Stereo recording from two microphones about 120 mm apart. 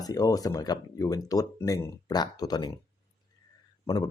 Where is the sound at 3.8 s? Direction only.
35° left (ahead or behind).